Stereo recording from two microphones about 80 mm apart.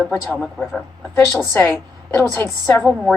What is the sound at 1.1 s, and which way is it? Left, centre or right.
Speech, left.